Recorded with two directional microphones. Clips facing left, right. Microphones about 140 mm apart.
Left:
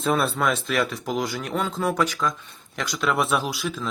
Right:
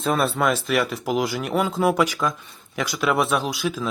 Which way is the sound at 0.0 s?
Centre (ahead or behind).